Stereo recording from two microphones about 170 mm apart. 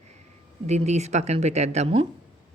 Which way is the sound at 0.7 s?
40° right (ahead or behind).